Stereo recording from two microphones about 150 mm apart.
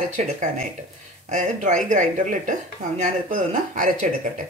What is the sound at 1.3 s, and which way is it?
A woman's voice, 55° right (ahead or behind).